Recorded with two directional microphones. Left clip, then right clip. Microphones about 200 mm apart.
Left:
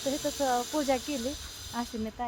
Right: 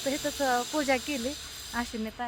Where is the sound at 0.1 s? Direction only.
10° right (ahead or behind).